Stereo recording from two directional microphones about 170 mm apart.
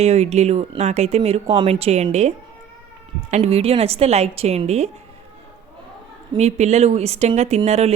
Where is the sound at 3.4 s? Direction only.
35° right (ahead or behind).